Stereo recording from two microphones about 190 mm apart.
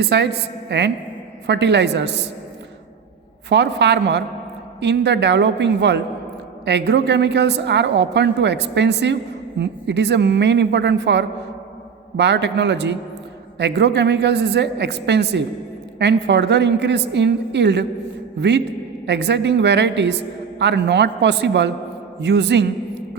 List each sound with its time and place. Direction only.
0.0 s a woman's voice: 65° right (ahead or behind)
3.5 s a woman's voice: 65° right (ahead or behind)